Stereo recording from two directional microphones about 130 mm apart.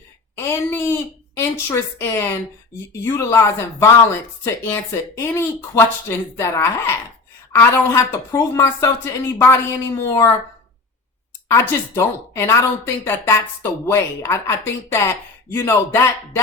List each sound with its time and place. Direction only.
0.3 s a sound: 20° left (ahead or behind)
1.4 s a woman's voice: 20° left (ahead or behind)
11.4 s speech: 20° left (ahead or behind)
15.5 s speech: 20° left (ahead or behind)